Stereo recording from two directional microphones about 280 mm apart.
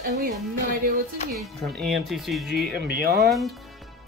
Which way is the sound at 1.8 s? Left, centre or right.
Centre.